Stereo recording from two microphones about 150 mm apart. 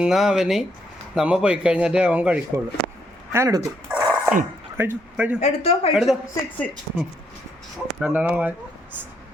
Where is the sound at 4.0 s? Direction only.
25° right (ahead or behind).